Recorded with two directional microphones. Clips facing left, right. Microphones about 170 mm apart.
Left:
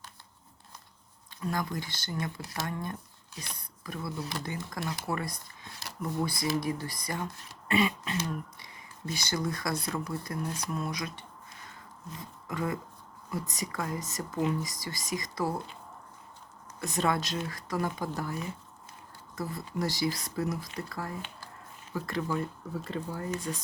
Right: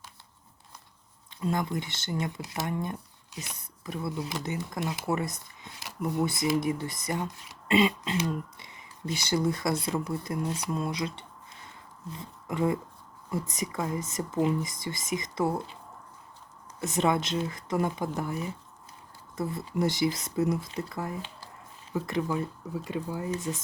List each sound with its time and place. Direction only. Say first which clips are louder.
1.4 s speech: right 3 dB; 25° right (ahead or behind)
16.8 s speech: right 3 dB; 20° right (ahead or behind)
19.4 s speech: right 4 dB; 25° right (ahead or behind)